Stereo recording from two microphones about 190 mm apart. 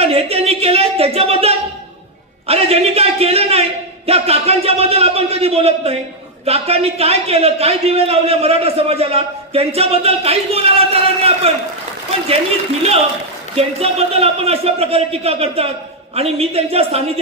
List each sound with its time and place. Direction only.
0.0 s a sound: 30° right (ahead or behind)
2.4 s a man's voice: 30° right (ahead or behind)
13.6 s a man's voice: 30° right (ahead or behind)